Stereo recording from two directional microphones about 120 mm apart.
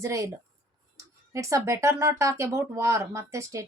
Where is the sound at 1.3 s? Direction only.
25° right (ahead or behind).